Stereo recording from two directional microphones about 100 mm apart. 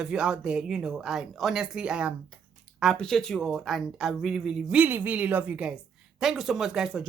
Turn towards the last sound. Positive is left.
turn(degrees=-5)  # may be behind; listen again after turning